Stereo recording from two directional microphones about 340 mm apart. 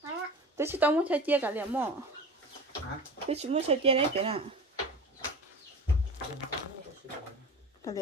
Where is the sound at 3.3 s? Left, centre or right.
Centre.